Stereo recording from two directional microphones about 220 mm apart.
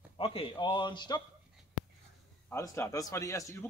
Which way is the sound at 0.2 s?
25° left (ahead or behind).